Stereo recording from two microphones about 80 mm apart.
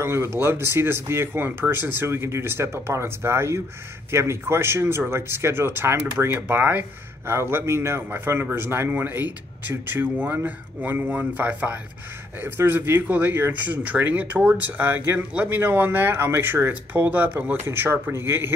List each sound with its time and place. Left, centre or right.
0.0 s speech: right